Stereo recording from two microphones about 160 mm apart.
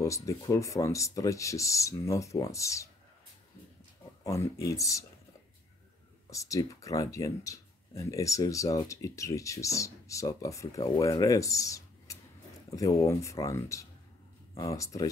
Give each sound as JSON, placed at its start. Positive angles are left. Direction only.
{"t": 0.0, "sound": "speech", "side_deg": 20}
{"t": 4.2, "sound": "speech", "side_deg": 20}
{"t": 6.3, "sound": "speech", "side_deg": 20}